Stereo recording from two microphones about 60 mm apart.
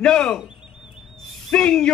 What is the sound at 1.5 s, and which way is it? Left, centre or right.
Speech, centre.